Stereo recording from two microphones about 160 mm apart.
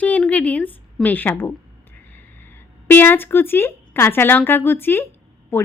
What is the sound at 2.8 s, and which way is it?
A woman's voice, 10° left (ahead or behind).